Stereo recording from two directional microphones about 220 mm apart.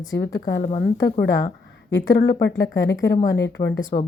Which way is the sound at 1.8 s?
55° left (ahead or behind).